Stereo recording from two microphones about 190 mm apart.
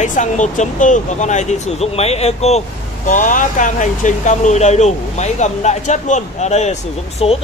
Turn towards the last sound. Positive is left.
turn(degrees=30)  # may be behind; listen again after turning